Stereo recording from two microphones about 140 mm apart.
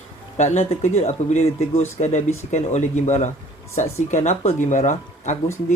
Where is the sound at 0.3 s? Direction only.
55° left (ahead or behind).